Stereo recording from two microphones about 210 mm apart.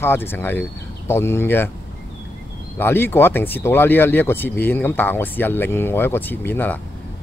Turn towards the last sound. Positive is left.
turn(degrees=10)  # may be behind; listen again after turning